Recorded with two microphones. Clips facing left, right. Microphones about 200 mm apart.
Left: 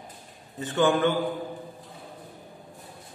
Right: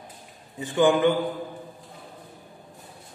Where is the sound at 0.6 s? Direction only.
15° right (ahead or behind).